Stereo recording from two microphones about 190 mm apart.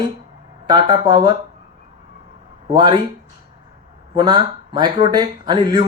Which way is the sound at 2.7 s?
25° right (ahead or behind).